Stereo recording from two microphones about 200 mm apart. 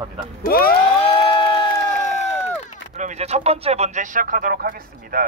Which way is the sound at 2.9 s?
35° right (ahead or behind).